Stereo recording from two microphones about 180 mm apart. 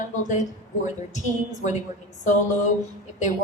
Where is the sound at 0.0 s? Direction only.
45° left (ahead or behind).